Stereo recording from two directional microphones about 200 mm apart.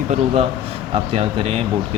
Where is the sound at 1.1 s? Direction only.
30° right (ahead or behind).